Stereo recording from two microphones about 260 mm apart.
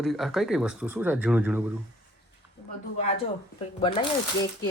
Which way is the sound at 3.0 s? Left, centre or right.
Left.